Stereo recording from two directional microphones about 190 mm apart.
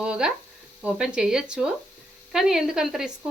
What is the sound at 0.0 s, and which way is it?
Chopping, 5° right (ahead or behind).